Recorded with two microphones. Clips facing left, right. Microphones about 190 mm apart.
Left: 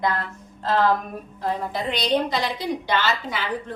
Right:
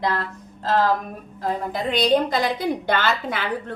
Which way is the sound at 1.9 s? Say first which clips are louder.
Right 4 dB; 50° right (ahead or behind).